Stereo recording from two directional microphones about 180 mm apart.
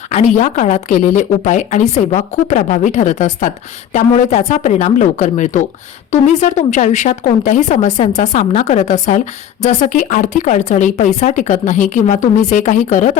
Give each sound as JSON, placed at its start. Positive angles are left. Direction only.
{"t": 0.1, "sound": "a woman's voice", "side_deg": 40}